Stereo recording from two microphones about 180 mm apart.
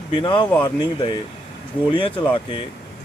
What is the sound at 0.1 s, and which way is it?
Speech, 30° left (ahead or behind).